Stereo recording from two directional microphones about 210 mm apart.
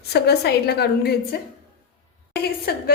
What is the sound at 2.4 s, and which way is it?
Speech, 50° left (ahead or behind).